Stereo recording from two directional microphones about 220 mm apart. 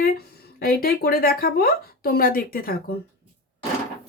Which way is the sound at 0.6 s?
45° left (ahead or behind).